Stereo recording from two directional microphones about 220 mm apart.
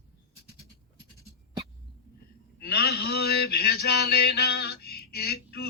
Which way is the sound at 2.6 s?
45° left (ahead or behind).